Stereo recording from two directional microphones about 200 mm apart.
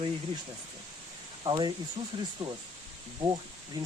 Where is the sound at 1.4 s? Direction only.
25° right (ahead or behind).